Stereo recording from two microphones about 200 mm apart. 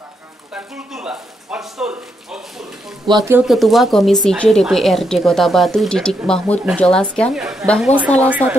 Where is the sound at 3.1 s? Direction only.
20° right (ahead or behind).